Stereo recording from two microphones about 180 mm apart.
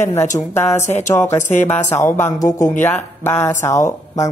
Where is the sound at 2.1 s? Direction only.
15° left (ahead or behind).